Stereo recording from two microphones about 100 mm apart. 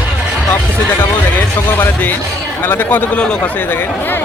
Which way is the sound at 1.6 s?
20° left (ahead or behind).